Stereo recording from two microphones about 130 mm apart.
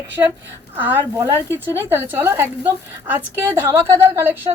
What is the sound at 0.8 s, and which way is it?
Speech, 15° right (ahead or behind).